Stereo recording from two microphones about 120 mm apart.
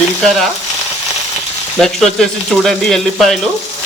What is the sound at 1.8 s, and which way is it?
A man's voice, 5° left (ahead or behind).